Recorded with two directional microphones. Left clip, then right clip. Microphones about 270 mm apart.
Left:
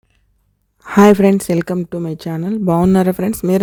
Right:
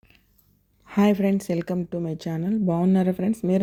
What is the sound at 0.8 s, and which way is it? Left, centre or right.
Speech, left.